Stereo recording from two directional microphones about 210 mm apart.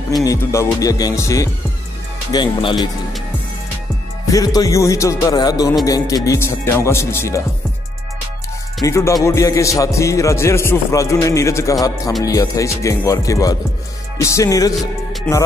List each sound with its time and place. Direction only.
0.2 s a man's voice: 15° left (ahead or behind)
4.3 s a man's voice: 15° left (ahead or behind)
8.8 s a man's voice: 15° left (ahead or behind)
15.3 s music: 5° left (ahead or behind)